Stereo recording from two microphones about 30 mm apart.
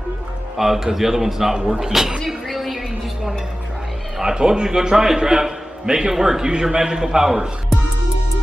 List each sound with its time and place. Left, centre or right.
0.6 s a man's voice: centre
2.2 s a sound: centre
4.2 s speech: right
4.9 s a man's voice: centre